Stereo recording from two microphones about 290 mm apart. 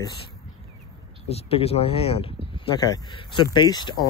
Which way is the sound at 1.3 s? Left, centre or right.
Left.